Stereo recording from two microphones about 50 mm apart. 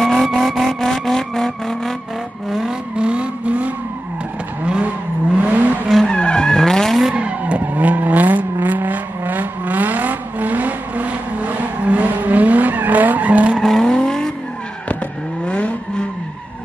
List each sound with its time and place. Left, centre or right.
0.0 s vehicle: centre
3.0 s vehicle: right
6.0 s vehicle: centre
7.2 s vehicle: right
13.6 s vehicle: centre
13.8 s vehicle: centre
15.4 s vehicle: left